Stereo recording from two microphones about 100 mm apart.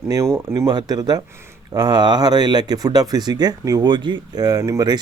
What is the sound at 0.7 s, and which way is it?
Speech, 40° right (ahead or behind).